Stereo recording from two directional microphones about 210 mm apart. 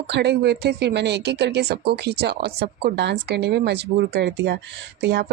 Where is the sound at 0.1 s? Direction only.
55° right (ahead or behind).